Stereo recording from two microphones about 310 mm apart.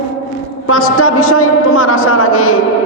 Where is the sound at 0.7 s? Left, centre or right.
Left.